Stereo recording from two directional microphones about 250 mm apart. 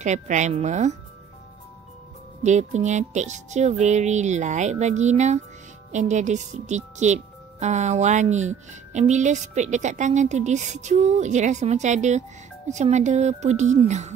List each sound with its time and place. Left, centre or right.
0.0 s a woman's voice: right
2.4 s a woman's voice: right